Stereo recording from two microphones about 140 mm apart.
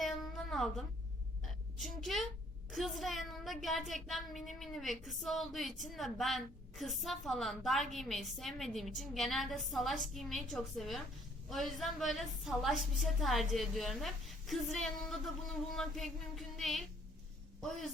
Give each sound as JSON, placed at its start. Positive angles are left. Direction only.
{"t": 0.5, "sound": "a woman's voice", "side_deg": 0}